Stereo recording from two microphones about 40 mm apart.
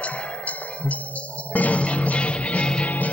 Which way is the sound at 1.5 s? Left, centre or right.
Left.